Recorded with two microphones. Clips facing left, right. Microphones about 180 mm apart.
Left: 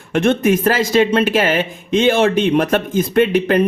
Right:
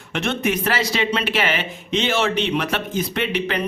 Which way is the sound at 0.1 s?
50° left (ahead or behind).